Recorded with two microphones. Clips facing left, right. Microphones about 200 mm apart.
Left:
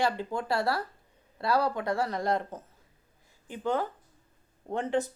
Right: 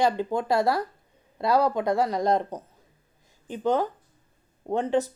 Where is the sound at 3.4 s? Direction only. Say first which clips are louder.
Right 5 dB; 20° right (ahead or behind).